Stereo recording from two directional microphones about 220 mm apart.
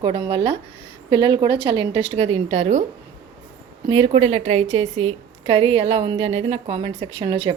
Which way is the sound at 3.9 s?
25° right (ahead or behind).